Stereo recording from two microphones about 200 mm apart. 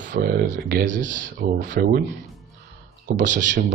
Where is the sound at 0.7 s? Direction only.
55° right (ahead or behind).